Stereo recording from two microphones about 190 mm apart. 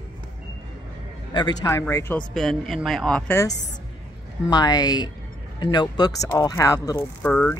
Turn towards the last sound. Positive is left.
turn(degrees=5)  # may be behind; listen again after turning